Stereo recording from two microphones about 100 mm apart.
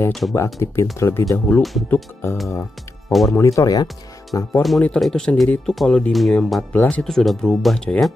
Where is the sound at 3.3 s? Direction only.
30° left (ahead or behind).